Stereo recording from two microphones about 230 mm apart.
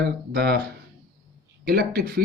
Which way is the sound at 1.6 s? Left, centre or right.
Right.